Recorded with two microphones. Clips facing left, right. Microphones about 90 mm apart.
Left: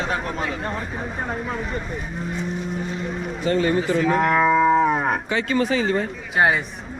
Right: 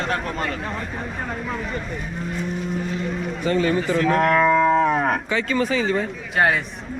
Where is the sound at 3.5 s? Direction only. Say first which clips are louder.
Even; 40° left (ahead or behind).